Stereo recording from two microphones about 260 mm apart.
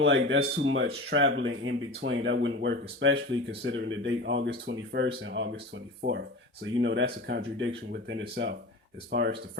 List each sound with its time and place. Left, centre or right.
0.0 s speech: right